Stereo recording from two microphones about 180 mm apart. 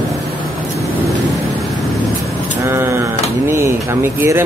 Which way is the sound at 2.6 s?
15° right (ahead or behind).